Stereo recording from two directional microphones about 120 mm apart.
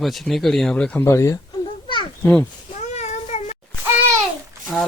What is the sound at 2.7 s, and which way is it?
Child singing, 75° left (ahead or behind).